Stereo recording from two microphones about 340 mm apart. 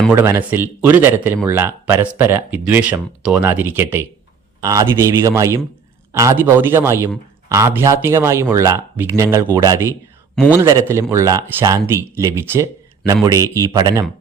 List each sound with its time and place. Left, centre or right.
0.0 s a man's voice: centre
10.3 s a man's voice: centre
10.6 s a man's voice: centre